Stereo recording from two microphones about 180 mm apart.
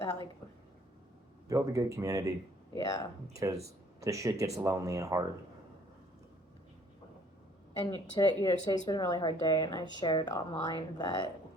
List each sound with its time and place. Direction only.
0.0 s a sound: 30° left (ahead or behind)
1.5 s speech: 20° right (ahead or behind)
3.3 s speech: 20° right (ahead or behind)
7.9 s speech: 25° left (ahead or behind)